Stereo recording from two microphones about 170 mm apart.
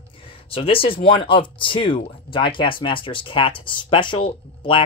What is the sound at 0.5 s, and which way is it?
Speech, 35° left (ahead or behind).